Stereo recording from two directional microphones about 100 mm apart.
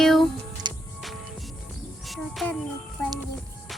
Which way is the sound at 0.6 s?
50° right (ahead or behind).